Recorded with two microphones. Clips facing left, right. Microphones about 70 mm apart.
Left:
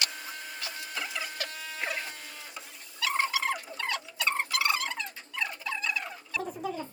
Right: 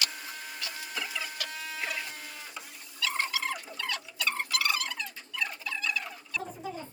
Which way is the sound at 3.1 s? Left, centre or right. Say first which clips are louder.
Left 5 dB; left.